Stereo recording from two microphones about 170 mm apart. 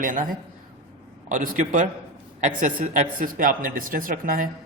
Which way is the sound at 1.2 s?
50° right (ahead or behind).